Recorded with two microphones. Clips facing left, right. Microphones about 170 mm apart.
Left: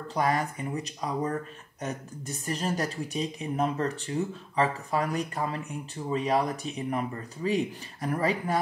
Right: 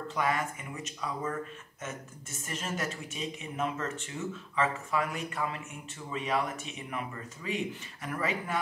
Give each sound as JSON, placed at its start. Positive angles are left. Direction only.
{"t": 0.1, "sound": "a woman's voice", "side_deg": 35}